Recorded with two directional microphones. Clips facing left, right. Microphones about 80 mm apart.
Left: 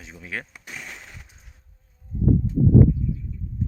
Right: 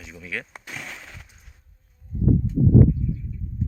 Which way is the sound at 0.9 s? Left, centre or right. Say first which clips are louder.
Right 1 dB; centre.